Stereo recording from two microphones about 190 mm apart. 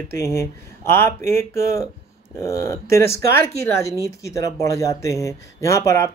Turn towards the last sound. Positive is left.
turn(degrees=15)  # may be behind; listen again after turning